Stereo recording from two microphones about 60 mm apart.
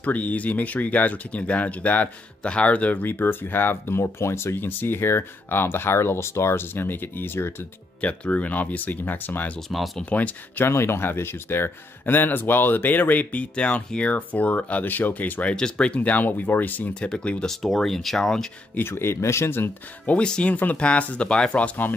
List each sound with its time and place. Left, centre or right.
0.0 s speech: left
4.6 s speech: left
8.0 s speech: left
9.7 s speech: centre
10.0 s speech: left
10.7 s speech: left
15.5 s speech: centre; by 16.9 s left
17.0 s speech: centre
18.8 s speech: left
20.1 s speech: centre